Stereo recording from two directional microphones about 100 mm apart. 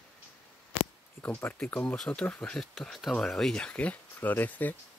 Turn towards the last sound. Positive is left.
turn(degrees=15)  # may be behind; listen again after turning